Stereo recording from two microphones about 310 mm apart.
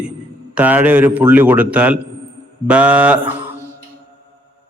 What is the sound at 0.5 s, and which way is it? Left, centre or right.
A man's voice, centre.